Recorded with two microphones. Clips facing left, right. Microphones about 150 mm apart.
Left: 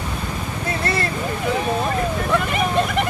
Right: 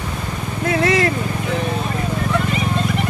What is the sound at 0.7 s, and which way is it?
Vehicle, 90° right.